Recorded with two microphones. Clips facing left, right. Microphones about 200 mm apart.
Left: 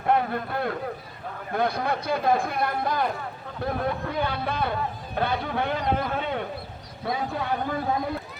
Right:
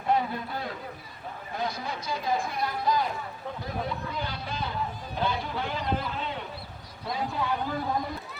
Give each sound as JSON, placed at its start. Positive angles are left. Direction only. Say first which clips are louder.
{"t": 0.0, "sound": "a man's voice", "louder": "left 3 dB", "side_deg": 60}